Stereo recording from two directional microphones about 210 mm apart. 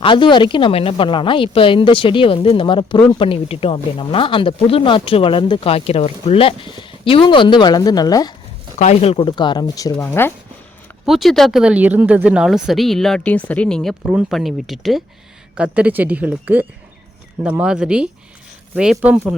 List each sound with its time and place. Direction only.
0.0 s speech: 25° left (ahead or behind)
8.8 s speech: 30° left (ahead or behind); by 10.3 s 10° left (ahead or behind)
11.0 s a woman's voice: centre (ahead or behind)